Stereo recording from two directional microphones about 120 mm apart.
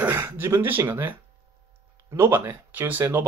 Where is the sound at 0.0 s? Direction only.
20° right (ahead or behind).